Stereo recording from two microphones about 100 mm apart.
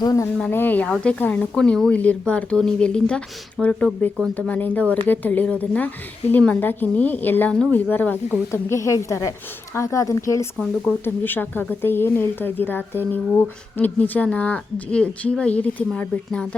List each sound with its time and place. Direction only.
0.0 s speech: 35° left (ahead or behind)
0.5 s a woman's voice: 20° left (ahead or behind)
7.5 s a woman's voice: 10° left (ahead or behind)
7.9 s speech: 20° left (ahead or behind)
11.0 s a woman's voice: 20° left (ahead or behind)